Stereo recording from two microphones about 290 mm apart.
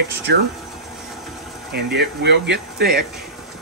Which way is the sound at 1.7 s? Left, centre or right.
Right.